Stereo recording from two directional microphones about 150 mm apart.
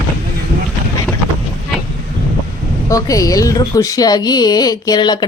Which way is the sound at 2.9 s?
20° left (ahead or behind).